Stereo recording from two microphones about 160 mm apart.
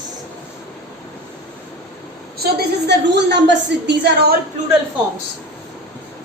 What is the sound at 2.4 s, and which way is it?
A woman's voice, 85° right.